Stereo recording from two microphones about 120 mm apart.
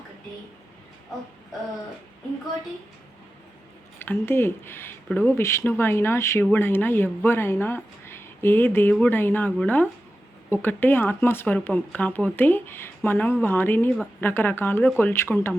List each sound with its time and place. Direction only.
4.0 s speech: 20° left (ahead or behind)